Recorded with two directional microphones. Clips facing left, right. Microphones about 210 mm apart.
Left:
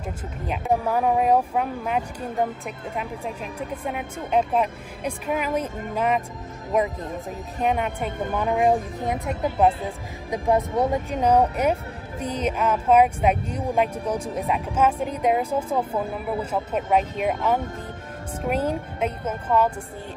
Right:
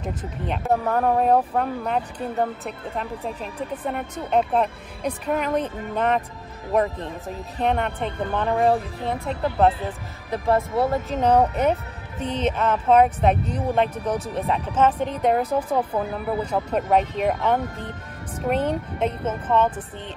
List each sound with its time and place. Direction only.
0.0 s speech: 10° left (ahead or behind)
7.6 s speech: 5° left (ahead or behind)